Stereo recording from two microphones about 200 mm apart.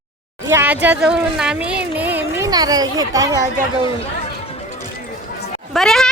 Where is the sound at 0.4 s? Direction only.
10° right (ahead or behind).